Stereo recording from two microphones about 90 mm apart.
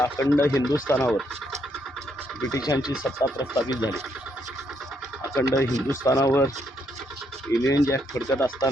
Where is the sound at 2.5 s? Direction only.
45° left (ahead or behind).